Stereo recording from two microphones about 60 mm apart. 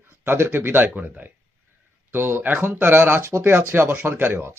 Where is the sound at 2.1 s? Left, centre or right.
Right.